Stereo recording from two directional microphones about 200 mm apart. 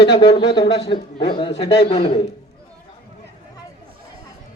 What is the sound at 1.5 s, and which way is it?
Speech, 60° left (ahead or behind).